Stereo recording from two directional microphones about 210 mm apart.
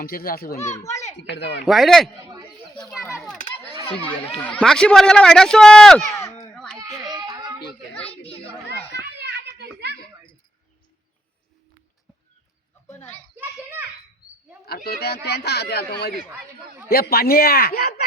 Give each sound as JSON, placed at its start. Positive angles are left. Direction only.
{"t": 0.0, "sound": "a man's voice", "side_deg": 45}
{"t": 0.5, "sound": "speech", "side_deg": 35}
{"t": 0.8, "sound": "speech", "side_deg": 15}
{"t": 1.3, "sound": "speech", "side_deg": 55}
{"t": 1.6, "sound": "a man's voice", "side_deg": 0}
{"t": 4.4, "sound": "a man's voice", "side_deg": 5}
{"t": 6.1, "sound": "a sound", "side_deg": 15}
{"t": 7.1, "sound": "a sound", "side_deg": -20}
{"t": 7.9, "sound": "a man's voice", "side_deg": 5}
{"t": 8.3, "sound": "a child's voice", "side_deg": 30}
{"t": 9.1, "sound": "a sound", "side_deg": -55}
{"t": 13.3, "sound": "children playing", "side_deg": -10}
{"t": 14.6, "sound": "a man's voice", "side_deg": 50}